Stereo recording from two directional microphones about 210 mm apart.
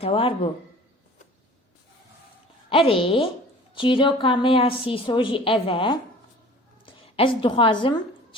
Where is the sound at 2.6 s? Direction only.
25° left (ahead or behind).